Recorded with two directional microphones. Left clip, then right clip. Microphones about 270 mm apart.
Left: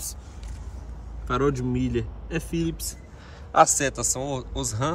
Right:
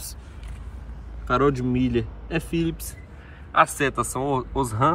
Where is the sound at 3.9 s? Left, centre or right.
Centre.